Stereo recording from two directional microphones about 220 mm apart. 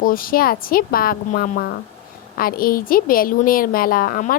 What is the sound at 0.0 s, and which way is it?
A woman's voice, 40° left (ahead or behind).